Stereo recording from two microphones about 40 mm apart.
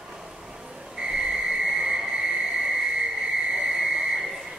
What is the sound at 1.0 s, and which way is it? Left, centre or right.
Whistle, centre.